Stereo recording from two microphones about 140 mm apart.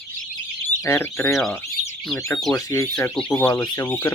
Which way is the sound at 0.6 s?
20° left (ahead or behind).